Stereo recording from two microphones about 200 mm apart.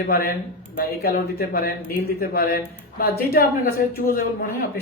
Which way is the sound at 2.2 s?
50° left (ahead or behind).